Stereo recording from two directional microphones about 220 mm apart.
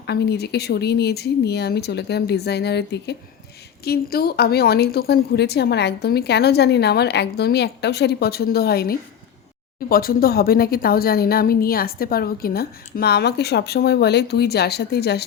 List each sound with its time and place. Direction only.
0.0 s a woman's voice: 50° left (ahead or behind)